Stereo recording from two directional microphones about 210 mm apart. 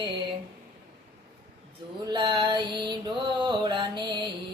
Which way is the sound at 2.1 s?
20° right (ahead or behind).